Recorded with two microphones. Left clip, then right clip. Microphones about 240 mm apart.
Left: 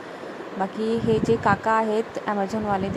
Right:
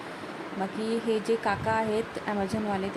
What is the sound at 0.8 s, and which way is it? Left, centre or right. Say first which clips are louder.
Speech: left 6 dB; centre.